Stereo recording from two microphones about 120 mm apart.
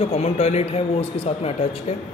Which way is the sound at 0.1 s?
60° left (ahead or behind).